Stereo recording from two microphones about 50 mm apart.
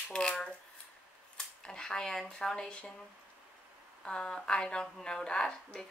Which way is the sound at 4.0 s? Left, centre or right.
Centre.